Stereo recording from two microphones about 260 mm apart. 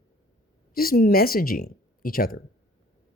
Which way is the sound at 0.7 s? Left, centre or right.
Left.